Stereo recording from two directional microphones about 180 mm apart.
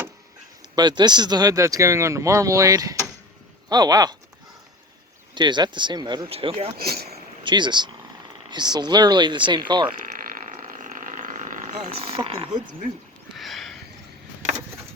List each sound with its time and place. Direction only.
0.8 s speech: 25° right (ahead or behind)
5.3 s speech: 25° right (ahead or behind)
6.7 s speech: 60° right (ahead or behind)
7.4 s speech: 25° right (ahead or behind)
9.9 s a sound: 50° right (ahead or behind)
11.9 s speech: 30° right (ahead or behind)
13.3 s sniff: centre (ahead or behind)